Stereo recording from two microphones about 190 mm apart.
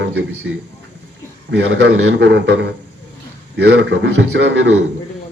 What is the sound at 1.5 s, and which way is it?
Speech, 65° right (ahead or behind).